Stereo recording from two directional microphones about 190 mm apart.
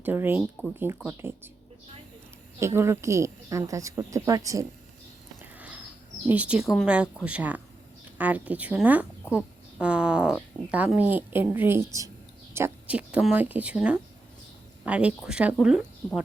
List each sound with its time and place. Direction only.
0.0 s a woman's voice: 10° right (ahead or behind)
2.6 s a woman's voice: 15° right (ahead or behind)
5.4 s a sound: 5° right (ahead or behind)
6.2 s a woman's voice: 5° right (ahead or behind)